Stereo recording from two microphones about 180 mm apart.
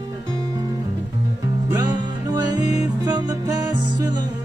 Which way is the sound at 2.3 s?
20° right (ahead or behind).